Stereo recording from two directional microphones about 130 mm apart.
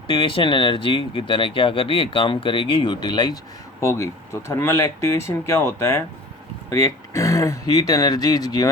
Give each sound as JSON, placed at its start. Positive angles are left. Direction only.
{"t": 0.1, "sound": "speech", "side_deg": 45}
{"t": 3.8, "sound": "speech", "side_deg": 20}